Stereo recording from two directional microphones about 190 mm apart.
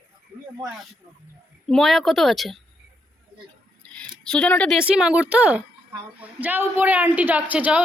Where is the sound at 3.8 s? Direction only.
5° left (ahead or behind).